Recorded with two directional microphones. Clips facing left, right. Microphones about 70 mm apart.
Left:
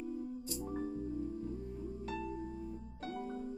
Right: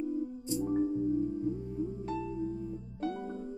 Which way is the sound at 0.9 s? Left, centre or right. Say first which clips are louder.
Right 9 dB; right.